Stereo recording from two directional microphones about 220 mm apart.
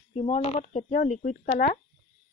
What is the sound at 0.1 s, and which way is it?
Speech, 30° left (ahead or behind).